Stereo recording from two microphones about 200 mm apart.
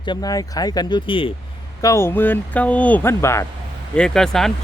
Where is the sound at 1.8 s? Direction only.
15° left (ahead or behind).